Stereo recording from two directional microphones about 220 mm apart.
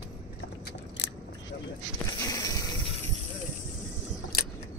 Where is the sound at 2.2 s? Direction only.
15° left (ahead or behind).